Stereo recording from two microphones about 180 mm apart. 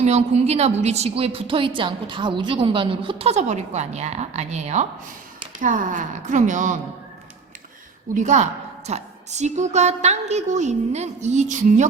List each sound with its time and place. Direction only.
0.0 s a woman's voice: 35° right (ahead or behind)
8.1 s a woman's voice: 40° right (ahead or behind)